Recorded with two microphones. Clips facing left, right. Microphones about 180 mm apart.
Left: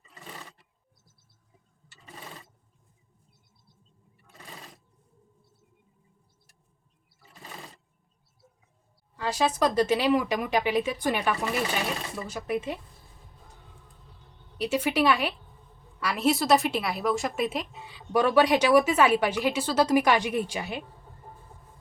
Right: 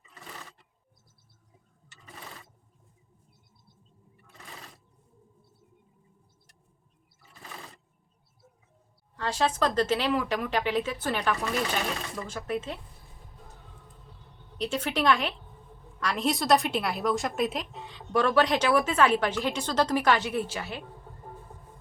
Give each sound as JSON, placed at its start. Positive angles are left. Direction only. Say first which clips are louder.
{"t": 9.1, "sound": "a woman's voice", "louder": "left 1 dB", "side_deg": 10}
{"t": 14.6, "sound": "a woman's voice", "louder": "left 3 dB", "side_deg": 10}